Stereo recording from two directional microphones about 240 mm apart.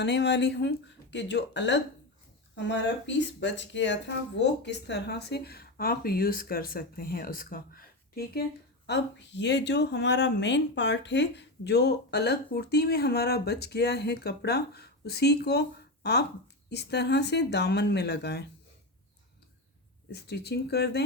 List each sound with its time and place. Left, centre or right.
0.0 s a woman's voice: left
20.1 s speech: left